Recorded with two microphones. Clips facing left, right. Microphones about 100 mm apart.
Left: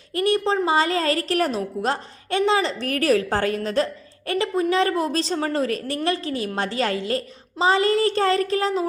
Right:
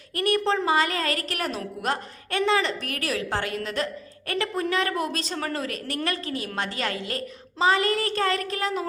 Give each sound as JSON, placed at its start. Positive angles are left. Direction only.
{"t": 0.1, "sound": "a woman's voice", "side_deg": 25}
{"t": 2.9, "sound": "a woman's voice", "side_deg": 40}
{"t": 4.3, "sound": "a woman's voice", "side_deg": 25}